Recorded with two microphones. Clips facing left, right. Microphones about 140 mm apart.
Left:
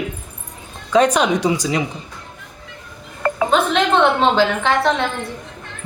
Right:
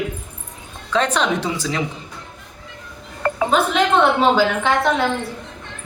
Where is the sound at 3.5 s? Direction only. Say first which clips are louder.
Even; 5° right (ahead or behind).